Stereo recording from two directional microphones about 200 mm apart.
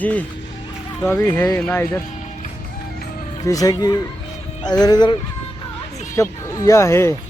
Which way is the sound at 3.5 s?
15° left (ahead or behind).